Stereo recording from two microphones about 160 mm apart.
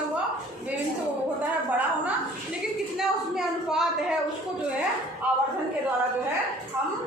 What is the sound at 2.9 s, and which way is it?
A woman's voice, 5° right (ahead or behind).